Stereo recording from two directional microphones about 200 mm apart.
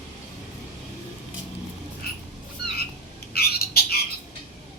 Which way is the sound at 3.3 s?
50° left (ahead or behind).